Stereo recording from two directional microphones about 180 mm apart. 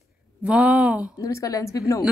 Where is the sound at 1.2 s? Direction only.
20° left (ahead or behind).